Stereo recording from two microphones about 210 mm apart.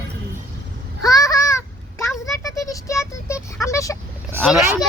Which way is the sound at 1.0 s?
15° left (ahead or behind).